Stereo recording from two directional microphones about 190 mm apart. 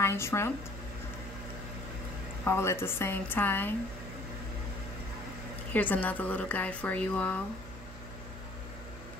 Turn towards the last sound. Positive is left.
turn(degrees=5)  # may be behind; listen again after turning